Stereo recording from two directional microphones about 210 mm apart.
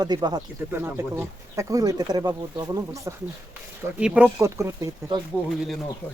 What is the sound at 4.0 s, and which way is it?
Speech, 5° right (ahead or behind).